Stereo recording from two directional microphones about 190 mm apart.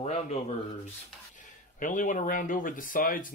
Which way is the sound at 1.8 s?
40° left (ahead or behind).